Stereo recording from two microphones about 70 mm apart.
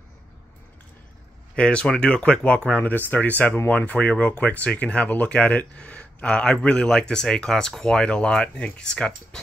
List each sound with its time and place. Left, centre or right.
1.5 s speech: centre